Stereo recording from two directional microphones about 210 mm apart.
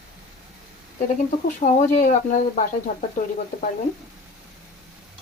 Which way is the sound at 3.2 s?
40° left (ahead or behind).